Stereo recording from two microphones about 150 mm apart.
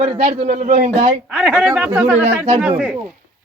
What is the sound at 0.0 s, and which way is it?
Speech, 45° right (ahead or behind).